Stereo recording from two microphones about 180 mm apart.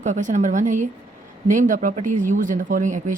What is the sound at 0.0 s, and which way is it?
Speech, 45° right (ahead or behind).